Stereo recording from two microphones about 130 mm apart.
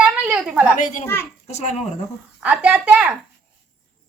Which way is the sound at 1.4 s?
60° left (ahead or behind).